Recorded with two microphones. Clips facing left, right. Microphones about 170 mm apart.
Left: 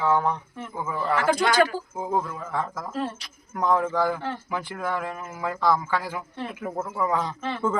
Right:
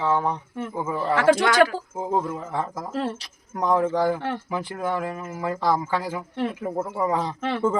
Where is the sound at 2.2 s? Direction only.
20° right (ahead or behind).